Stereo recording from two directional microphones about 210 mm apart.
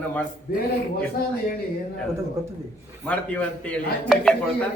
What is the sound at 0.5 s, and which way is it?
Speech, 45° left (ahead or behind).